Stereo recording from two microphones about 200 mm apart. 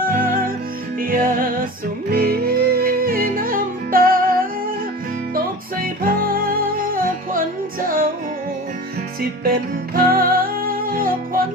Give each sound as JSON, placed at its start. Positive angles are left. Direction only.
{"t": 0.0, "sound": "music", "side_deg": -45}
{"t": 5.8, "sound": "music", "side_deg": -45}
{"t": 9.4, "sound": "music", "side_deg": -50}